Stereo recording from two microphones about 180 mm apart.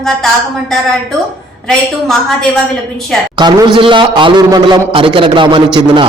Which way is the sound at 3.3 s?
25° right (ahead or behind).